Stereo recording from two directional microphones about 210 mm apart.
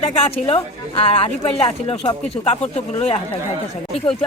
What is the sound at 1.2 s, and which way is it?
Speech, 25° left (ahead or behind).